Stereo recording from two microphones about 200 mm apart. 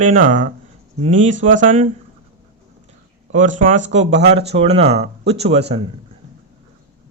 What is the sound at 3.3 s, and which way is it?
Speech, 40° right (ahead or behind).